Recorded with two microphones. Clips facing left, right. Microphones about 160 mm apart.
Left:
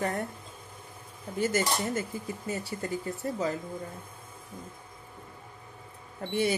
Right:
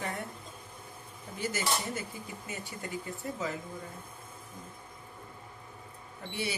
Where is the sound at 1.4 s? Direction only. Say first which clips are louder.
Left 5 dB; 45° left (ahead or behind).